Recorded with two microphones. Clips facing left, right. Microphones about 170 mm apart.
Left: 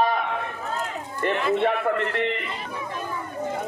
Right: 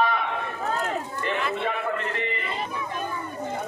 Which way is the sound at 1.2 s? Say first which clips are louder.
Left 8 dB; 60° left (ahead or behind).